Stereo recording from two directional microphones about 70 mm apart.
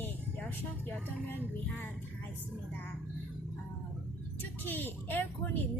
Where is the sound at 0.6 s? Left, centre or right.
Left.